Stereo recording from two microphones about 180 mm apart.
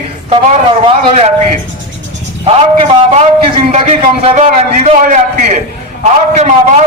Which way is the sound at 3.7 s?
40° right (ahead or behind).